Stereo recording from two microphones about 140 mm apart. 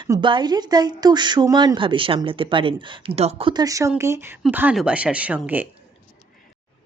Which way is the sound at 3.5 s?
25° right (ahead or behind).